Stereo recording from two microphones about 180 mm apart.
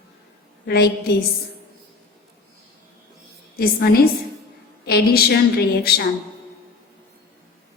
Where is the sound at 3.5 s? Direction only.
55° left (ahead or behind).